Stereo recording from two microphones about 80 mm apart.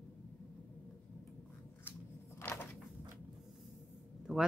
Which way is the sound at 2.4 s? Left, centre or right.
Left.